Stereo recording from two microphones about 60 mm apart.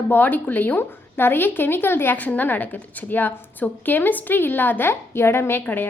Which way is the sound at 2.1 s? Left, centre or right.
Left.